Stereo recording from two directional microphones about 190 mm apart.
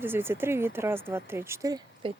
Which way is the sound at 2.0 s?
30° right (ahead or behind).